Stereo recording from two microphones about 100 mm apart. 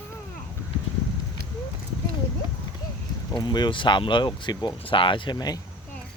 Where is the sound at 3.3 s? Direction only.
50° left (ahead or behind).